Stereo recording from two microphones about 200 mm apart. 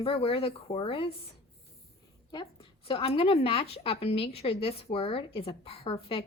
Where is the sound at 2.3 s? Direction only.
25° left (ahead or behind).